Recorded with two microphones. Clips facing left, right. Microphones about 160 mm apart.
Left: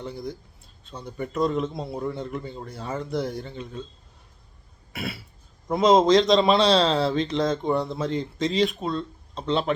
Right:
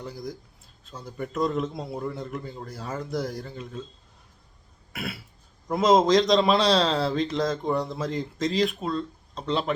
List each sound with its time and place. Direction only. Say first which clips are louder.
0.0 s a man's voice: left 2 dB; centre (ahead or behind)
4.9 s throat clearing: left 2 dB; centre (ahead or behind)
5.6 s a man's voice: left 2 dB; centre (ahead or behind)